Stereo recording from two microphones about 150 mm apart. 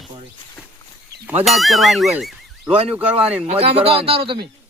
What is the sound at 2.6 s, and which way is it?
A man's voice, 40° right (ahead or behind).